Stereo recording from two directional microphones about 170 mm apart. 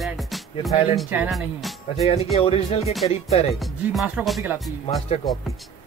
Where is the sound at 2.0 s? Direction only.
35° left (ahead or behind).